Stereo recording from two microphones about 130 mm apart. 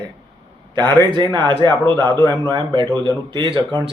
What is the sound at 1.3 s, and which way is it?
A man's voice, 35° right (ahead or behind).